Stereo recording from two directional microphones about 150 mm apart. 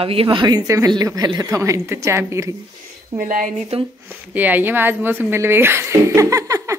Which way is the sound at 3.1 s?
65° right (ahead or behind).